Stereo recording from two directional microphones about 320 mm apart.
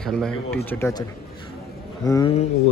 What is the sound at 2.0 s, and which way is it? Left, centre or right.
Speech, centre.